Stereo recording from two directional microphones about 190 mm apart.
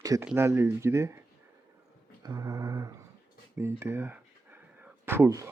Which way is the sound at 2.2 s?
15° right (ahead or behind).